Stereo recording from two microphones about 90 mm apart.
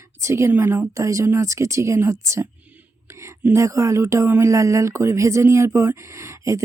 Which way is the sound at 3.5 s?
35° right (ahead or behind).